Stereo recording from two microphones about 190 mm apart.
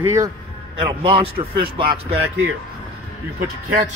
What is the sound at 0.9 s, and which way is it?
A man's voice, 30° right (ahead or behind).